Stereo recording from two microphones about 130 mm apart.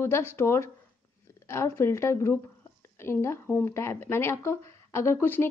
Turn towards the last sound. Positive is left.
turn(degrees=20)  # may be behind; listen again after turning